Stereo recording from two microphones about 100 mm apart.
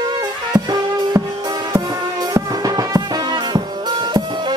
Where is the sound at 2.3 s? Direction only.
35° right (ahead or behind).